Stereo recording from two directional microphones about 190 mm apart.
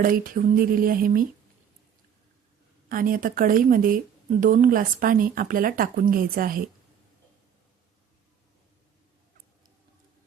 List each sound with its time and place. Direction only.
0.0 s speech: 45° right (ahead or behind)
2.9 s speech: 50° right (ahead or behind)